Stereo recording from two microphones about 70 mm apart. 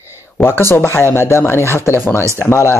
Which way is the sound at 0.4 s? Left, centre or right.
Left.